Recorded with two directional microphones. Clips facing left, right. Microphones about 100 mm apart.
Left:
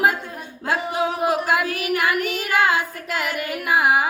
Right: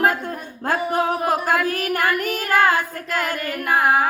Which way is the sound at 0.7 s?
45° right (ahead or behind).